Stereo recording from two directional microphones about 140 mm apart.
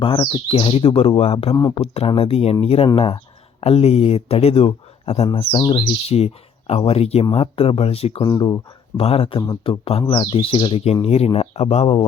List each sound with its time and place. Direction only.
0.0 s speech: 40° left (ahead or behind)
8.2 s speech: 30° left (ahead or behind)
9.0 s speech: 45° left (ahead or behind)